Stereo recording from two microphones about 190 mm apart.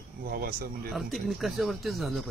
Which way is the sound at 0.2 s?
50° right (ahead or behind).